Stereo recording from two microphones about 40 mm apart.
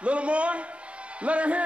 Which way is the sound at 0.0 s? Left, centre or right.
Right.